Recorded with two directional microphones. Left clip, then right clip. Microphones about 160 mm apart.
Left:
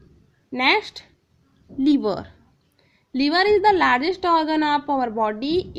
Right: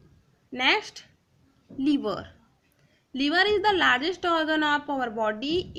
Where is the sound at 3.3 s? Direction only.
30° left (ahead or behind).